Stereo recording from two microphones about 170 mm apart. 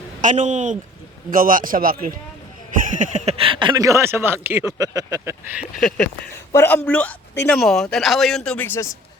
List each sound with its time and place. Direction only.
0.2 s a man's voice: 45° right (ahead or behind); by 5.4 s 15° right (ahead or behind)
5.5 s speech: 5° left (ahead or behind)
6.5 s a man's voice: 15° left (ahead or behind)